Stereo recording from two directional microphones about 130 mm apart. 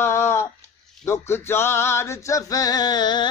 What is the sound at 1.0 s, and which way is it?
Male singing, 20° left (ahead or behind).